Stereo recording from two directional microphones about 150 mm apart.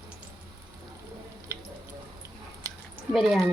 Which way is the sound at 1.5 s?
15° right (ahead or behind).